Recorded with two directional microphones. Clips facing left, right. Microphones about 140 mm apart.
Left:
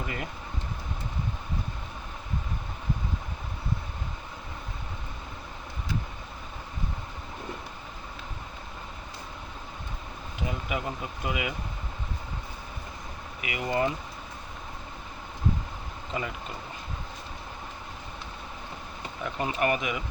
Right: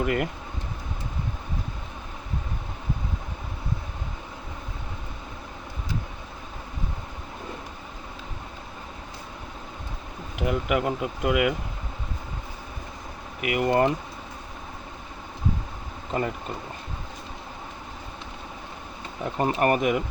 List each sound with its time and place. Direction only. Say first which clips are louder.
0.0 s speech: right 10 dB; 75° right (ahead or behind)
10.3 s speech: right 8 dB; 70° right (ahead or behind)
13.4 s speech: right 6 dB; 55° right (ahead or behind)
19.2 s speech: right 5 dB; 40° right (ahead or behind)